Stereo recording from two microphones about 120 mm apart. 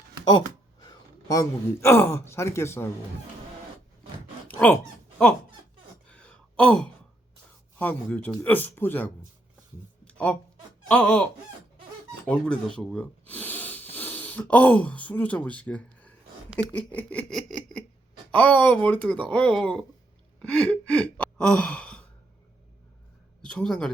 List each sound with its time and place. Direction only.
1.3 s speech: 25° left (ahead or behind)
4.4 s a sound: 15° left (ahead or behind)
6.1 s gasp: 10° left (ahead or behind)
7.8 s speech: 10° left (ahead or behind)
10.0 s a sound: 10° left (ahead or behind)
10.8 s wail: 10° left (ahead or behind)
12.2 s wheeze: 5° left (ahead or behind)
13.9 s speech: 15° left (ahead or behind)
16.7 s a sound: 15° left (ahead or behind)
18.3 s speech: 10° left (ahead or behind)
20.4 s gasp: 10° left (ahead or behind)
23.5 s speech: 5° left (ahead or behind)